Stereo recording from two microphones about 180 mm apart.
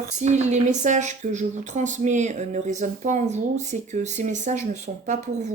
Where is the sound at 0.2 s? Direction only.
40° right (ahead or behind).